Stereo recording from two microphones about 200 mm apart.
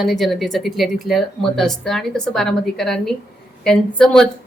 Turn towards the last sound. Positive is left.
turn(degrees=5)  # may be behind; listen again after turning